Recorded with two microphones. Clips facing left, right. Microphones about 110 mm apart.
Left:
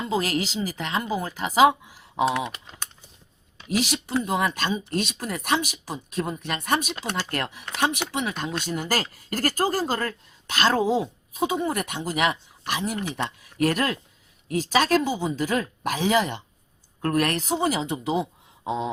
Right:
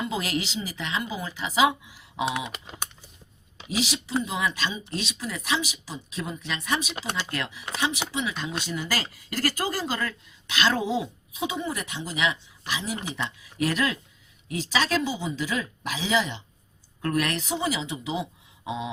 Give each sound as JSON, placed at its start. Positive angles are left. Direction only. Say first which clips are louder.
{"t": 0.0, "sound": "speech", "louder": "left 3 dB", "side_deg": 40}
{"t": 2.6, "sound": "speech", "louder": "right 3 dB", "side_deg": -15}
{"t": 3.7, "sound": "speech", "louder": "left 3 dB", "side_deg": 50}